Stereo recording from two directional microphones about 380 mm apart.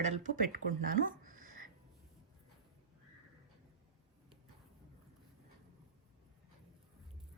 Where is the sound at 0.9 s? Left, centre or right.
Right.